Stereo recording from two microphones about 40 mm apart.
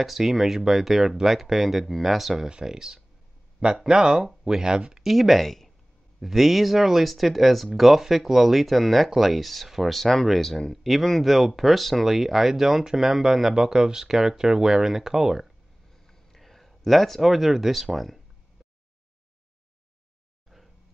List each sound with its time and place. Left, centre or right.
0.0 s speech: centre
2.4 s speech: centre
5.0 s speech: centre
16.1 s speech: centre